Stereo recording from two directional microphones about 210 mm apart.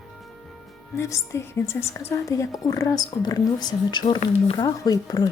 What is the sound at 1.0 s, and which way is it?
A woman's voice, 15° left (ahead or behind).